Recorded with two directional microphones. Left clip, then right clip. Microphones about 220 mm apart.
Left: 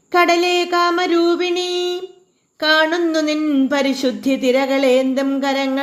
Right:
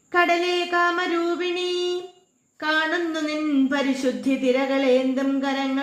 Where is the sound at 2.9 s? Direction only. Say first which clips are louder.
Left 7 dB; 35° left (ahead or behind).